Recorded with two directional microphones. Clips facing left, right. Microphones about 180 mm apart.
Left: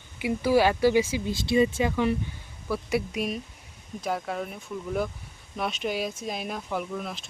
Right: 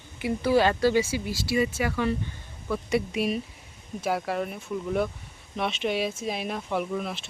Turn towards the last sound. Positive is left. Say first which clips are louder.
# right 3 dB
turn(degrees=0)  # may be behind; listen again after turning